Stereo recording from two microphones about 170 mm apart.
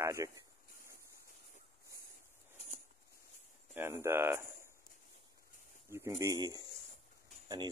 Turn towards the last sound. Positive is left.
turn(degrees=-25)  # may be behind; listen again after turning